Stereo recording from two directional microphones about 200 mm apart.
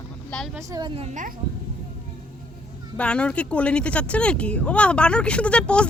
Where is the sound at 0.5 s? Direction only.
20° right (ahead or behind); by 1.3 s 35° right (ahead or behind).